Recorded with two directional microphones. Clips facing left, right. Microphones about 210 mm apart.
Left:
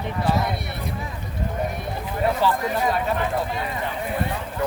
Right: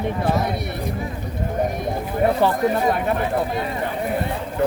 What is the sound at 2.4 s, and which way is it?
Speech, 55° right (ahead or behind).